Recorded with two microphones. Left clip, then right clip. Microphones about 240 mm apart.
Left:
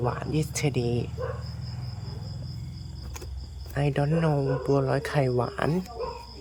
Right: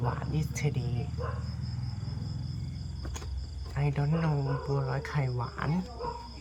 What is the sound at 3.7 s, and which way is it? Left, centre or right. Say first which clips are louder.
Speech: left 7 dB; left.